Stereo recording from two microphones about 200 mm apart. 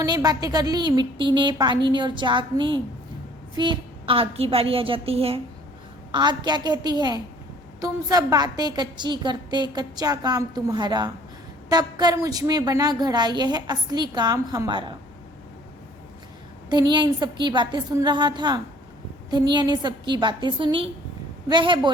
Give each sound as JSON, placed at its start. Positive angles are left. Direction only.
{"t": 0.0, "sound": "a woman's voice", "side_deg": -20}
{"t": 16.9, "sound": "a woman's voice", "side_deg": -20}